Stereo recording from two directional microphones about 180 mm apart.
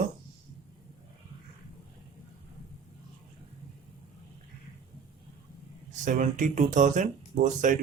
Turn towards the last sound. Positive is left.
turn(degrees=-45)  # may be behind; listen again after turning